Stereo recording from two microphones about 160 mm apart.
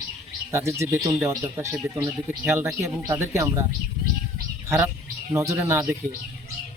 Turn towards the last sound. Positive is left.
turn(degrees=-15)  # may be behind; listen again after turning